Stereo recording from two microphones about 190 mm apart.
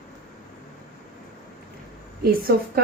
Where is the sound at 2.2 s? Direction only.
55° right (ahead or behind).